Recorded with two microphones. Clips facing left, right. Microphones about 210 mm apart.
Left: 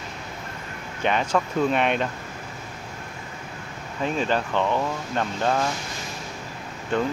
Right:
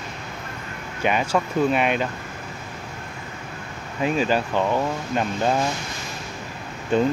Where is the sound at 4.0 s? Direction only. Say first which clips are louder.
Right 3 dB; 10° right (ahead or behind).